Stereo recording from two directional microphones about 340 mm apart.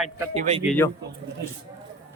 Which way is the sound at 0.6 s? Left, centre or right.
Centre.